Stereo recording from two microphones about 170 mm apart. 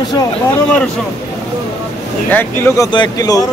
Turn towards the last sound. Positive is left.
turn(degrees=20)  # may be behind; listen again after turning